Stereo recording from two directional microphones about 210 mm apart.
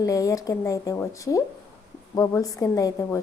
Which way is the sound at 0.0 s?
15° left (ahead or behind).